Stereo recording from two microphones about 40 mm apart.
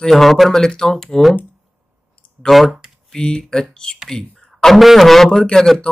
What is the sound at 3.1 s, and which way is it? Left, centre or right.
Speech, centre.